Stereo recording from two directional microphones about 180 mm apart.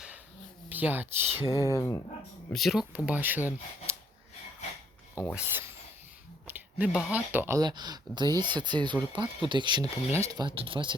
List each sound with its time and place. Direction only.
0.7 s speech: 10° right (ahead or behind)
1.7 s speech: 15° left (ahead or behind)
2.5 s speech: centre (ahead or behind)
5.3 s speech: 10° right (ahead or behind); by 10.9 s 30° right (ahead or behind)